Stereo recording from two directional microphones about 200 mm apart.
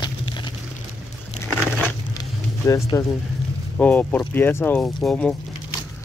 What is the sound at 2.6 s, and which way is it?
Speech, 15° left (ahead or behind).